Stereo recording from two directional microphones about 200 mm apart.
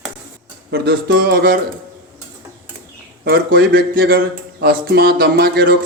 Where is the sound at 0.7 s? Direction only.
50° right (ahead or behind).